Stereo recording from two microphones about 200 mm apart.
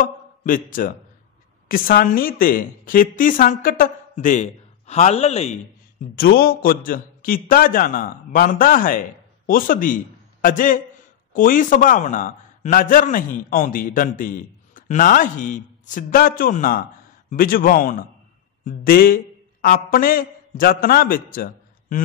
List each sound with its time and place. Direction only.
0.0 s a man's voice: 40° left (ahead or behind)
6.1 s a man's voice: 50° left (ahead or behind)